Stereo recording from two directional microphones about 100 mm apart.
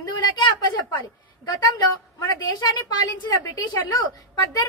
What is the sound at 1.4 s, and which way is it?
A woman's voice, 40° left (ahead or behind).